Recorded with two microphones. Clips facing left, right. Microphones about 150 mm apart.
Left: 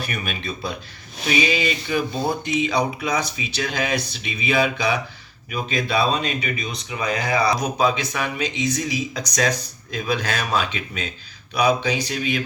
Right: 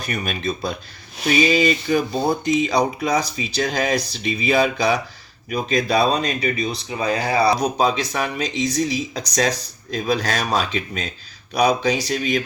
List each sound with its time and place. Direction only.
0.0 s speech: 40° right (ahead or behind)